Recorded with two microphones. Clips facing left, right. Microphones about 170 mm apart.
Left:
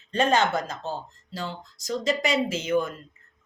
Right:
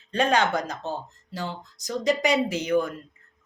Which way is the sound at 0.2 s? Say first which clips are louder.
Even; 15° right (ahead or behind).